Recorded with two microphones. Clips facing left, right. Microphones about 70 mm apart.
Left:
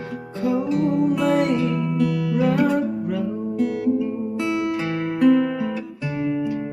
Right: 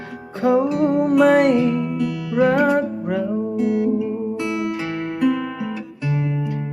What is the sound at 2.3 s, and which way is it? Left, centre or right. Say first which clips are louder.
Music: right 5 dB; right.